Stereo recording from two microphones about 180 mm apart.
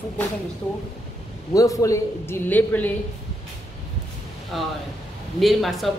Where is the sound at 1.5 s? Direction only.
20° left (ahead or behind).